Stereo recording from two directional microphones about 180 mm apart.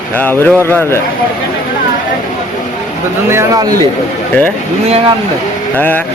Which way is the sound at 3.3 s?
20° right (ahead or behind).